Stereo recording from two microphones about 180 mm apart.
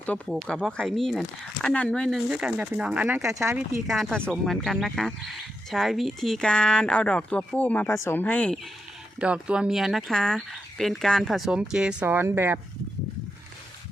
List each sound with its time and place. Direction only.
0.0 s speech: 5° left (ahead or behind)
3.3 s speech: 15° right (ahead or behind)
3.8 s speech: centre (ahead or behind)
9.2 s speech: 5° right (ahead or behind)